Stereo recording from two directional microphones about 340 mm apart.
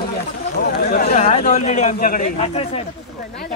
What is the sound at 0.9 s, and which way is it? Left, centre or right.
A man's voice, left.